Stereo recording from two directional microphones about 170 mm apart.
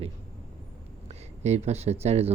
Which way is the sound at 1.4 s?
40° right (ahead or behind).